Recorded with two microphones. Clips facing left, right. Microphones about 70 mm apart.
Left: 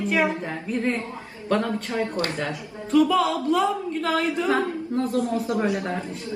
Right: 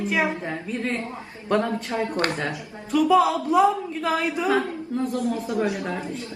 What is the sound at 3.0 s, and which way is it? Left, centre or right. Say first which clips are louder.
Speech: right 3 dB; centre.